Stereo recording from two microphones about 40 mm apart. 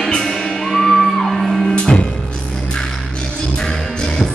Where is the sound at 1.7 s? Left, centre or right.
Left.